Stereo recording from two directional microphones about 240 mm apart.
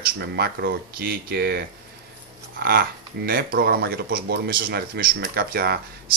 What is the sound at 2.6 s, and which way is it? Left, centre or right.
Speech, right.